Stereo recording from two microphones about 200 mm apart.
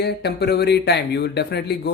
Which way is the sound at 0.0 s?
55° left (ahead or behind).